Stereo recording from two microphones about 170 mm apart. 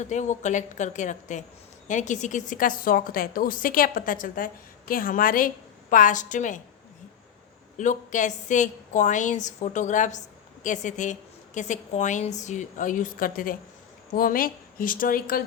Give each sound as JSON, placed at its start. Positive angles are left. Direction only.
{"t": 0.0, "sound": "a woman's voice", "side_deg": 45}
{"t": 7.8, "sound": "a woman's voice", "side_deg": 45}